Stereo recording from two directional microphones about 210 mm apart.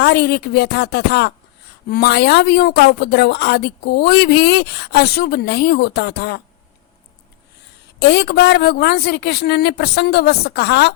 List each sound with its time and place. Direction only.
0.0 s a woman's voice: 50° left (ahead or behind)
8.0 s a woman's voice: 55° left (ahead or behind)